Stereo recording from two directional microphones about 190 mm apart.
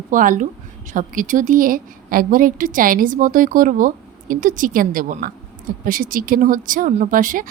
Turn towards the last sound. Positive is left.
turn(degrees=-45)  # may be behind; listen again after turning